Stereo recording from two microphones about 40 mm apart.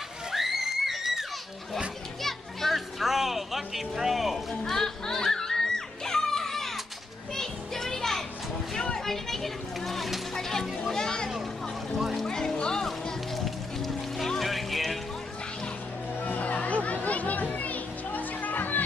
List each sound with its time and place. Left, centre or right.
0.3 s a sound: centre
2.2 s children playing: centre
3.0 s a sound: centre
4.6 s music: centre
7.3 s children playing: centre
8.7 s a sound: centre
10.3 s children playing: centre
12.0 s music: centre
12.3 s music: centre
13.8 s music: centre
16.3 s music: left